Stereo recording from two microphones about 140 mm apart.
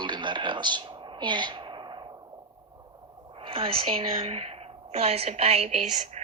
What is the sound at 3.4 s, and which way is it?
A woman's voice, 40° right (ahead or behind).